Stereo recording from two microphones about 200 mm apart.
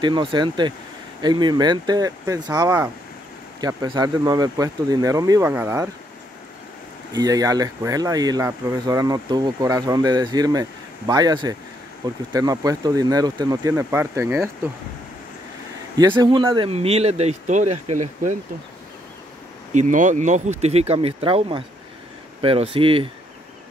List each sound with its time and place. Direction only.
0.0 s speech: 25° right (ahead or behind)
7.1 s speech: 20° right (ahead or behind)
16.0 s speech: 20° right (ahead or behind)
19.7 s speech: 40° right (ahead or behind)